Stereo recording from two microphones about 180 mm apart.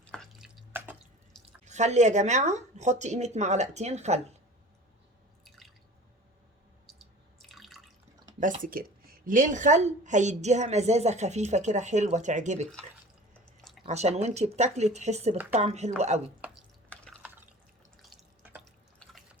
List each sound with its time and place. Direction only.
0.0 s drip: 5° left (ahead or behind)
1.6 s a woman's voice: 40° right (ahead or behind)
5.5 s drip: centre (ahead or behind)
7.3 s drip: centre (ahead or behind)
8.6 s a woman's voice: 55° right (ahead or behind)
13.4 s chewing: 5° left (ahead or behind)
13.8 s a woman's voice: 40° right (ahead or behind)
16.9 s drip: 5° left (ahead or behind)